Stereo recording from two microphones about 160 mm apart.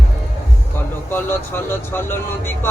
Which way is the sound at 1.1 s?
10° left (ahead or behind).